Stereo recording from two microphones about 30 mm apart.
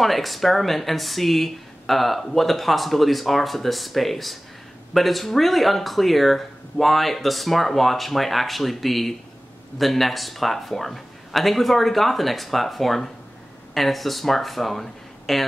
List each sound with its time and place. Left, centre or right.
0.0 s speech: centre